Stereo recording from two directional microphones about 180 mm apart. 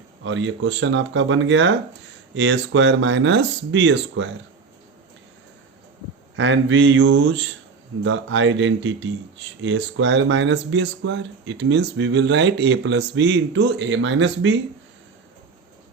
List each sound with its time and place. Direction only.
0.2 s speech: 90° right
6.3 s speech: 90° right